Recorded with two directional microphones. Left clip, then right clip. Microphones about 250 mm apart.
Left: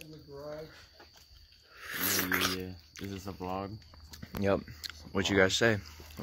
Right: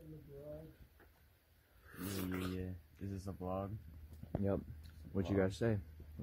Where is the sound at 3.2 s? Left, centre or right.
Centre.